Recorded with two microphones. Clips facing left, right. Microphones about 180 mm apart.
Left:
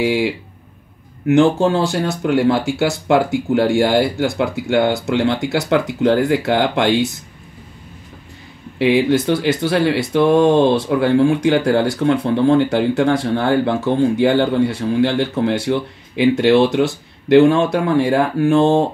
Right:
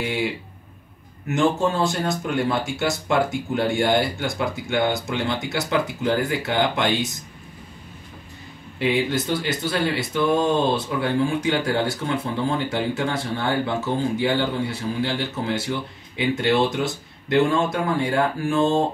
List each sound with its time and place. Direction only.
0.0 s speech: 80° left; by 7.1 s 65° left (ahead or behind)
8.7 s speech: 70° left (ahead or behind)